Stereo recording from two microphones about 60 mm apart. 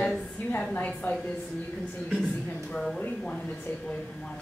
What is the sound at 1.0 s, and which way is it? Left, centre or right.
Speech, left.